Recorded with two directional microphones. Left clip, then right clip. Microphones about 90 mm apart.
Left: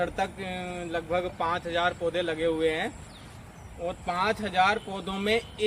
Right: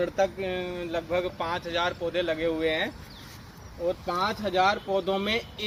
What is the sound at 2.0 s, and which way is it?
Speech, 20° left (ahead or behind).